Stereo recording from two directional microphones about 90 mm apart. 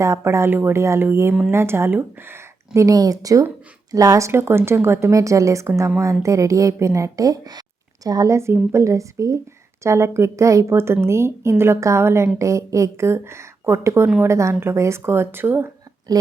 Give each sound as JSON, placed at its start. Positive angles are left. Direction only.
{"t": 0.0, "sound": "speech", "side_deg": -30}
{"t": 4.3, "sound": "speech", "side_deg": -25}
{"t": 16.1, "sound": "speech", "side_deg": -45}